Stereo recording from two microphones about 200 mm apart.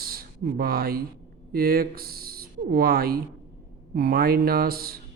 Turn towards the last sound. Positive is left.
turn(degrees=-50)  # may be behind; listen again after turning